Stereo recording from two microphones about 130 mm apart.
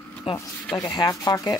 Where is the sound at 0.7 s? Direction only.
35° left (ahead or behind).